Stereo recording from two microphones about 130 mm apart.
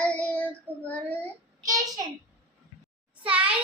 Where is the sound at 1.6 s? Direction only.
25° right (ahead or behind).